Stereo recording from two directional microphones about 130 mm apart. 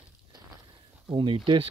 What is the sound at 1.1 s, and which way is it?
Speech, 40° right (ahead or behind).